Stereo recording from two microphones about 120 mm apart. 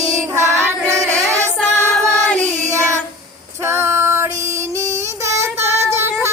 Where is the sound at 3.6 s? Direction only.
20° right (ahead or behind).